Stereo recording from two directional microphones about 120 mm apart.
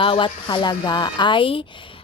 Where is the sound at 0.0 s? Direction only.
45° left (ahead or behind).